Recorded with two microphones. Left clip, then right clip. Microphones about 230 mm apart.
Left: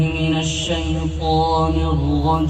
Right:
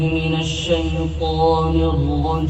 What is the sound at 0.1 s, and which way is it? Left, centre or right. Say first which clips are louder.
Mantra: even; left.